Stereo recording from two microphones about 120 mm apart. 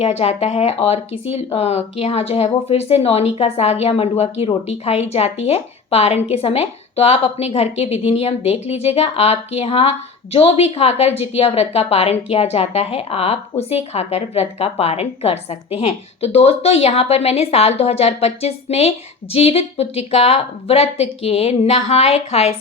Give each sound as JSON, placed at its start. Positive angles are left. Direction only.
{"t": 0.0, "sound": "a woman's voice", "side_deg": 60}